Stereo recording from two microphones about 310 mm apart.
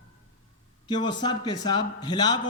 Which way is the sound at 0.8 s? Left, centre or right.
Centre.